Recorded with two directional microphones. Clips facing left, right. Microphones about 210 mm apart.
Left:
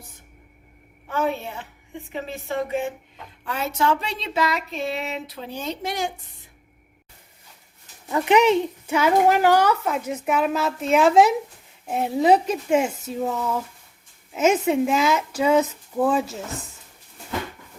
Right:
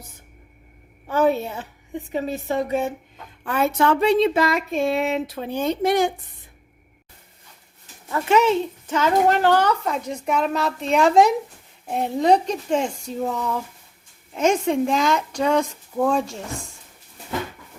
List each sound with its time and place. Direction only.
1.1 s a sound: 40° right (ahead or behind)
3.4 s speech: 55° right (ahead or behind)
8.1 s a woman's voice: 15° left (ahead or behind)